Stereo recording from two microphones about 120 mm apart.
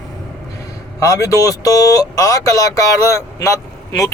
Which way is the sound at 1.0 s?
30° left (ahead or behind).